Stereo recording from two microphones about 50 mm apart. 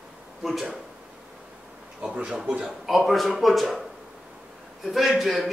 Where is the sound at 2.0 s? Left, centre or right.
Right.